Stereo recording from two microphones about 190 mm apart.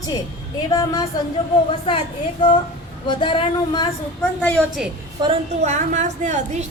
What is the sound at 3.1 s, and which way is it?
Speech, 25° left (ahead or behind).